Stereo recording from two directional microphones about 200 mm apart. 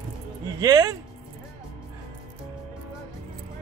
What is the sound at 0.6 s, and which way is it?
Speech, 15° right (ahead or behind).